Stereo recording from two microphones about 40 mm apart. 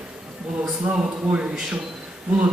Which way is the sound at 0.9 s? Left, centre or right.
Right.